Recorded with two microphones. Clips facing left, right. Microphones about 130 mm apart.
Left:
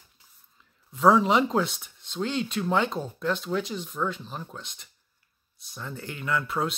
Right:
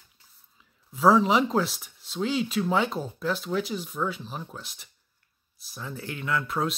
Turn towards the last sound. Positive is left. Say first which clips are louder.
# even
turn(degrees=0)  # may be behind; listen again after turning